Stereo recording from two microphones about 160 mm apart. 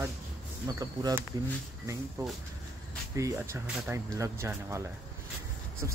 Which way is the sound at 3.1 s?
15° right (ahead or behind).